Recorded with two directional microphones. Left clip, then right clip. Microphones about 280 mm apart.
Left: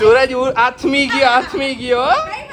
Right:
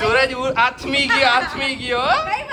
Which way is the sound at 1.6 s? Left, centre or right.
Centre.